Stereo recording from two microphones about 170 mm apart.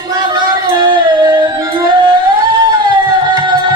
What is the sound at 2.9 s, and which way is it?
Music, 25° right (ahead or behind).